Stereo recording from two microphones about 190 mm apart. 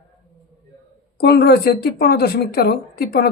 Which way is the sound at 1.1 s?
55° left (ahead or behind).